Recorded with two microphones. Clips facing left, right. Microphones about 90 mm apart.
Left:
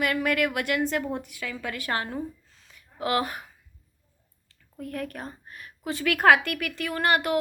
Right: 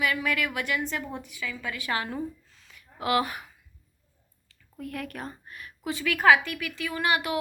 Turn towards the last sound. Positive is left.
turn(degrees=50)  # may be behind; listen again after turning